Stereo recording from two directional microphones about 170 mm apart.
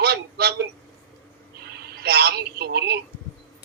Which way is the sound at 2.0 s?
70° right (ahead or behind).